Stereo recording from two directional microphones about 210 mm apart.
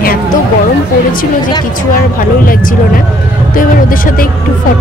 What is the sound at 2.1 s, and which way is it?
Speech, 40° left (ahead or behind).